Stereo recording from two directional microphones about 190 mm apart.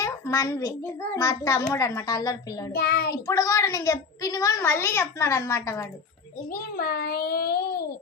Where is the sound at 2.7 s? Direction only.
60° left (ahead or behind).